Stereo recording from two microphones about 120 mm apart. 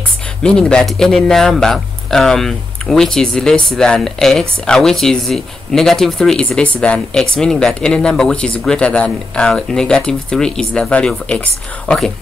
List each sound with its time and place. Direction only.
0.4 s speech: 5° left (ahead or behind)